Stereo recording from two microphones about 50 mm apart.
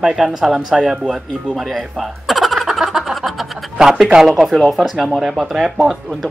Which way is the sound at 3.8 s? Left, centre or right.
Centre.